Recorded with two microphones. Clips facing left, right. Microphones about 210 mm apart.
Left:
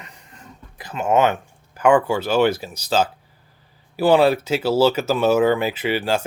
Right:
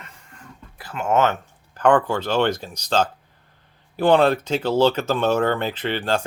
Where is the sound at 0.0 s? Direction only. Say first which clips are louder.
Left 1 dB; 15° left (ahead or behind).